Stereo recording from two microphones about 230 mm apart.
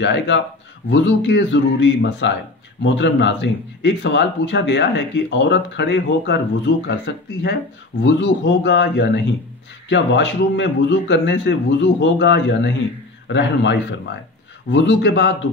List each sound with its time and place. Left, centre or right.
0.0 s speech: left